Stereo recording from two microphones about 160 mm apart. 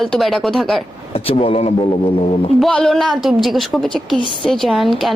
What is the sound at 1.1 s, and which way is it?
Speech, 35° left (ahead or behind).